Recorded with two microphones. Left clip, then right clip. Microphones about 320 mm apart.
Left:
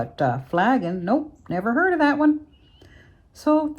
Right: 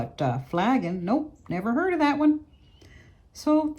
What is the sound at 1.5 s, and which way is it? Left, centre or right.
Speech, left.